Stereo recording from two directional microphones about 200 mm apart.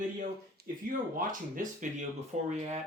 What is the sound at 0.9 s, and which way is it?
Speech, 45° right (ahead or behind).